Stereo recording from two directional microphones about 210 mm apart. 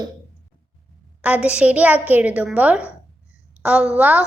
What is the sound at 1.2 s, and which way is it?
A woman's voice, 5° right (ahead or behind).